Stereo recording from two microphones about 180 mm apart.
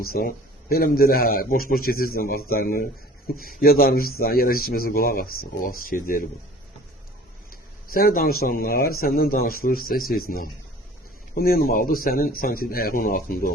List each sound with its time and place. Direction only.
0.0 s a man's voice: 55° left (ahead or behind)
7.5 s a man's voice: 55° left (ahead or behind)